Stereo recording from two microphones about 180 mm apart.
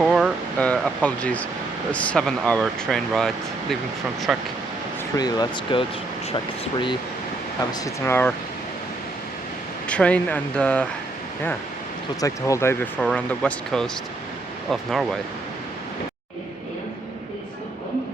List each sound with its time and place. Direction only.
0.0 s a sound: centre (ahead or behind)
0.7 s speech: 10° left (ahead or behind)
5.1 s speech: 20° left (ahead or behind)
7.7 s speech: 15° left (ahead or behind)
9.9 s speech: 5° left (ahead or behind)
12.2 s speech: 15° left (ahead or behind)
13.0 s speech: 5° left (ahead or behind)